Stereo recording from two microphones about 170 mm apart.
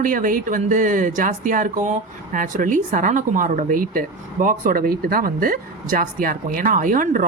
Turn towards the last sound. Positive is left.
turn(degrees=-55)  # may be behind; listen again after turning